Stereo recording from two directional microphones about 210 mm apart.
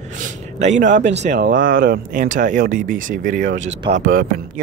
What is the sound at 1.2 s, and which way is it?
Speech, 40° right (ahead or behind).